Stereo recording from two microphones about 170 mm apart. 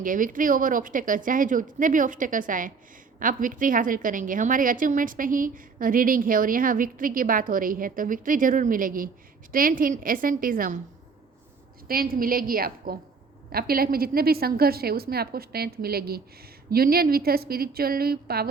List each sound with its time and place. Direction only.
0.0 s a woman's voice: 50° right (ahead or behind)
11.9 s a woman's voice: 60° right (ahead or behind)